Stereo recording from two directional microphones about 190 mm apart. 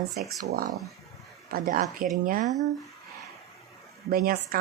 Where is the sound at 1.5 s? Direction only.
50° right (ahead or behind).